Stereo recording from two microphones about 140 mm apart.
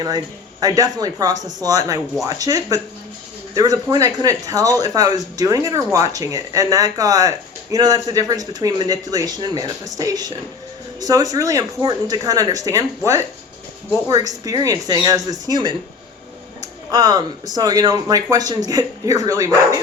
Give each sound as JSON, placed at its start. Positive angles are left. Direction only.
{"t": 0.6, "sound": "speech", "side_deg": -25}
{"t": 14.1, "sound": "speech", "side_deg": -25}